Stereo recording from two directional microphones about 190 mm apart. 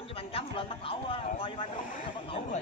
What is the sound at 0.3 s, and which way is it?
Speech, 30° left (ahead or behind).